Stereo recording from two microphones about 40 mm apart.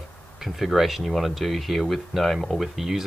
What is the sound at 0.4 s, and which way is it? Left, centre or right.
Speech, centre.